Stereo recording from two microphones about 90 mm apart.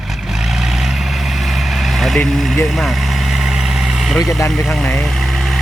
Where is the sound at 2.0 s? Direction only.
Centre (ahead or behind).